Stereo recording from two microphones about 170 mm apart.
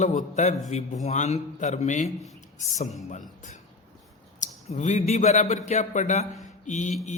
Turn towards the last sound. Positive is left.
turn(degrees=45)  # may be behind; listen again after turning